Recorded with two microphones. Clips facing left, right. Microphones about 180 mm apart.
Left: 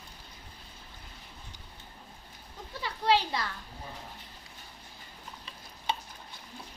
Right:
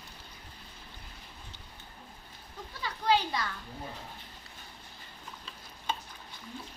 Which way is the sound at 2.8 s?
30° left (ahead or behind).